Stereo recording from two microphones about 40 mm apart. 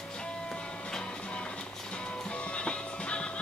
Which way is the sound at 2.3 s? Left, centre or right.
Left.